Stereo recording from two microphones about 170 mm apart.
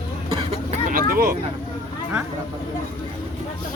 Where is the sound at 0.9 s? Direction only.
60° right (ahead or behind).